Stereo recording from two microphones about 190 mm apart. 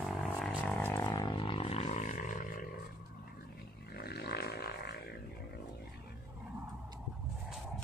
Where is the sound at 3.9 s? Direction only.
55° left (ahead or behind).